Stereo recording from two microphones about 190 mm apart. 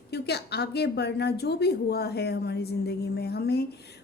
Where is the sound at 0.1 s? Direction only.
60° left (ahead or behind).